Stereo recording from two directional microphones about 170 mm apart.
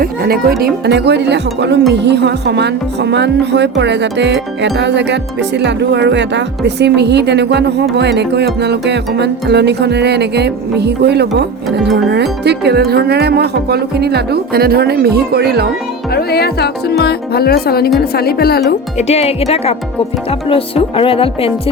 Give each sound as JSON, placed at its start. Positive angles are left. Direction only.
{"t": 0.0, "sound": "a woman's voice", "side_deg": -60}
{"t": 16.1, "sound": "a woman's voice", "side_deg": 70}
{"t": 18.9, "sound": "speech", "side_deg": 40}